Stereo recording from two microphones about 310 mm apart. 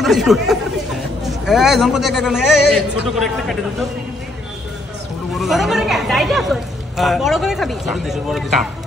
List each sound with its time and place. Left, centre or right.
0.0 s speech: centre
5.3 s speech: centre